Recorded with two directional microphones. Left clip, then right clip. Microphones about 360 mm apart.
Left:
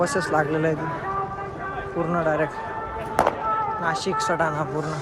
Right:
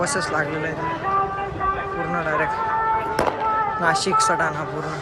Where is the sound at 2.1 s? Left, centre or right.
Centre.